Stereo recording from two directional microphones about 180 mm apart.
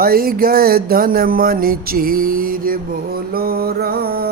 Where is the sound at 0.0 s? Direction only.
55° right (ahead or behind).